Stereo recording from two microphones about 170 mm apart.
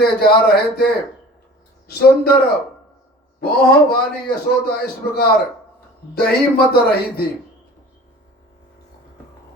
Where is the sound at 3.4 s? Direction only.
65° left (ahead or behind).